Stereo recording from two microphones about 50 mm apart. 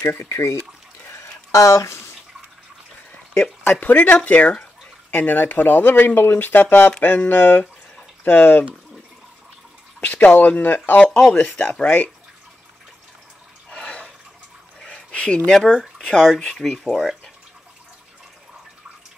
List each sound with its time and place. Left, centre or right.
0.3 s speech: left
1.0 s a sound: left
3.7 s speech: left
9.9 s speech: left
11.1 s speech: centre
11.3 s speech: left
13.7 s water: left
14.8 s a sound: centre
16.1 s speech: centre
16.4 s speech: centre